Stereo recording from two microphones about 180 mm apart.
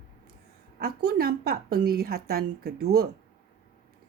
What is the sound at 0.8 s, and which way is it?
Speech, 60° right (ahead or behind).